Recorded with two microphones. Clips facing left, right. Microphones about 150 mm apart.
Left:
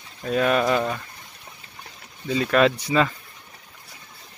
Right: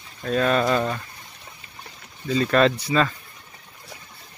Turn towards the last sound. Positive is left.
turn(degrees=15)  # may be behind; listen again after turning